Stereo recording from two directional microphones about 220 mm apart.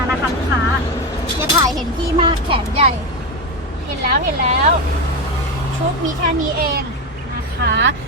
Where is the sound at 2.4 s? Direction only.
25° right (ahead or behind).